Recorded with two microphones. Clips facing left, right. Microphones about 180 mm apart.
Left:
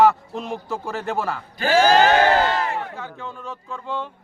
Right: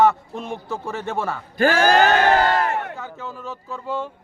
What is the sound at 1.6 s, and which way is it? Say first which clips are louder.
Speech: even; 55° right (ahead or behind).